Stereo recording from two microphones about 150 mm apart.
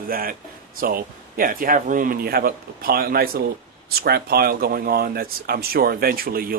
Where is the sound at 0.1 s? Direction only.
75° right (ahead or behind).